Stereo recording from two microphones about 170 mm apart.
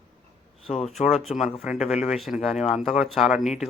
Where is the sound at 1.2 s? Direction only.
Centre (ahead or behind).